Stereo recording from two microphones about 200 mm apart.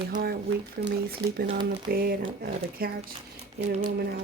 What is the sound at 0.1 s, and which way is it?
Speech, 45° right (ahead or behind).